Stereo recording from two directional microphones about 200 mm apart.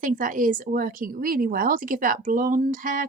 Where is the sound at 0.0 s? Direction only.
40° right (ahead or behind).